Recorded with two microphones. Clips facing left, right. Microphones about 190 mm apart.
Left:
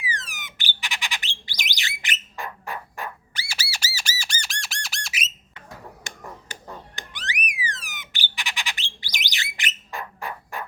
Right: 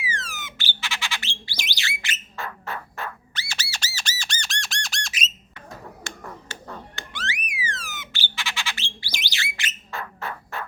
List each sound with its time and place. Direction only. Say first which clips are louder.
0.0 s bird: right 1 dB; 15° left (ahead or behind)
4.2 s squawk: right 1 dB; 10° left (ahead or behind)
6.1 s a sound: right 1 dB; 15° left (ahead or behind)